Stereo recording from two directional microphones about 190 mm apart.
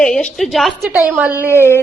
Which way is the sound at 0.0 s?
5° left (ahead or behind).